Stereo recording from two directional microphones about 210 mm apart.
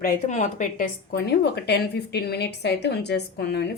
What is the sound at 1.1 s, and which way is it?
Speech, 50° left (ahead or behind).